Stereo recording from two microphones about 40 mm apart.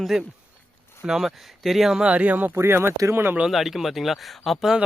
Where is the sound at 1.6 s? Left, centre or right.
Centre.